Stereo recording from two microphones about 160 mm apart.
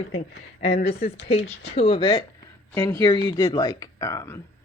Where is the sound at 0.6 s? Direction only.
40° left (ahead or behind).